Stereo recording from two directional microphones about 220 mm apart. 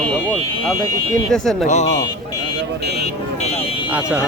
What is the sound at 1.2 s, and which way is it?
Speech, centre (ahead or behind).